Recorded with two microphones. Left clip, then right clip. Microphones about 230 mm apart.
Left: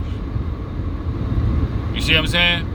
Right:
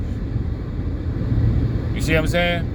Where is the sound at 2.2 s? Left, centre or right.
Left.